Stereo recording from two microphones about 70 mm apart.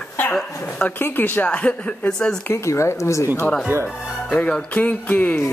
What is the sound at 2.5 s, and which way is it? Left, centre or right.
Speech, left.